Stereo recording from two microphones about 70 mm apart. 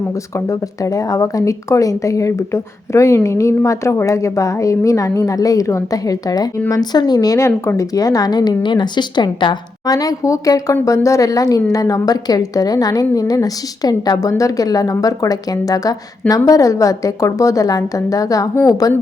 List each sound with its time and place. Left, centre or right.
0.3 s speech: left
6.7 s a woman's voice: left
7.8 s a woman's voice: left